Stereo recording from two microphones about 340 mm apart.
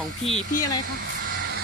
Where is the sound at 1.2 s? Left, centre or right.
Right.